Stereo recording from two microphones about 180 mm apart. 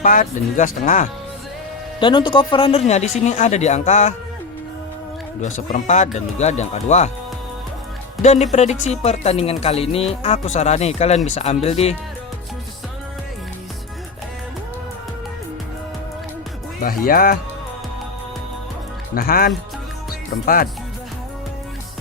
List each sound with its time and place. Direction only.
0.0 s speech: 45° left (ahead or behind)
2.0 s speech: 25° left (ahead or behind)
5.4 s speech: 40° left (ahead or behind)
8.2 s speech: 40° left (ahead or behind)
16.8 s speech: 50° left (ahead or behind)
19.1 s speech: 55° left (ahead or behind)
20.1 s music: 55° left (ahead or behind)